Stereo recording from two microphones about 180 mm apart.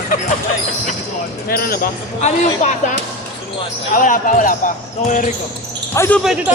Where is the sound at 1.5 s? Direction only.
55° left (ahead or behind).